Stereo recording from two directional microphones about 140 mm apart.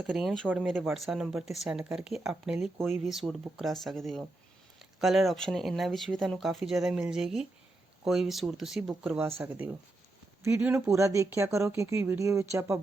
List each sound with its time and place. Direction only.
0.0 s speech: centre (ahead or behind); by 12.8 s 20° right (ahead or behind)